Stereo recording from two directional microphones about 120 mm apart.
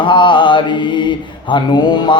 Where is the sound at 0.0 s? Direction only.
40° left (ahead or behind).